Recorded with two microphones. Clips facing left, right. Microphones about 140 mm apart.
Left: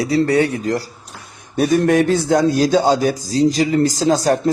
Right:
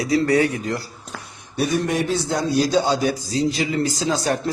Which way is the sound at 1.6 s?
55° left (ahead or behind).